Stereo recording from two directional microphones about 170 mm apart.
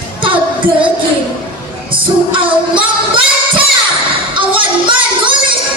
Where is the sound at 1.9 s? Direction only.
30° right (ahead or behind).